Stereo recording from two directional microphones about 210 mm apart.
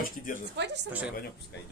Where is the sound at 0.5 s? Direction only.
55° right (ahead or behind).